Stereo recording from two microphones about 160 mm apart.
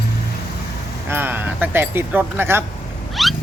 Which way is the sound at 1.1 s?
15° right (ahead or behind).